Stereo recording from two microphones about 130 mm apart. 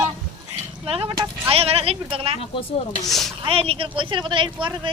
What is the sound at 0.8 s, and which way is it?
A woman's voice, 50° right (ahead or behind).